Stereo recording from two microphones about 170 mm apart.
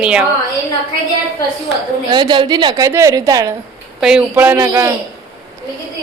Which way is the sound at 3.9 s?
5° right (ahead or behind).